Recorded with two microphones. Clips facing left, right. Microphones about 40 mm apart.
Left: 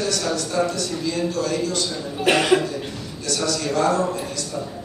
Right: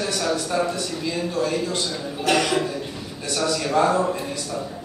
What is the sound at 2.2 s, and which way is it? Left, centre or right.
Speech, left.